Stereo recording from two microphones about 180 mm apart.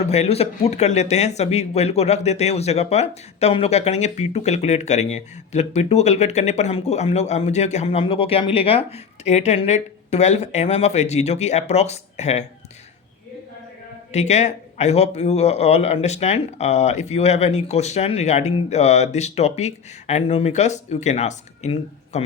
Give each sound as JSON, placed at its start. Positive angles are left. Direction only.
{"t": 0.0, "sound": "speech", "side_deg": 35}
{"t": 14.1, "sound": "speech", "side_deg": 40}